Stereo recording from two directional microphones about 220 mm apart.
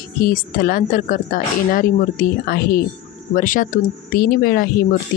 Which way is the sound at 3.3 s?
35° left (ahead or behind).